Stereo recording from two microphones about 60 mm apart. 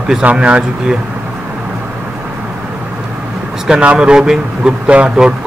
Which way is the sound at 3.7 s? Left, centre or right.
Centre.